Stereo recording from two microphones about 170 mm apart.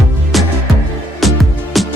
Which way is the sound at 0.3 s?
Centre (ahead or behind).